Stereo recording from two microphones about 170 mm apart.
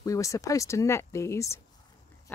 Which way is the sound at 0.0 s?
20° left (ahead or behind).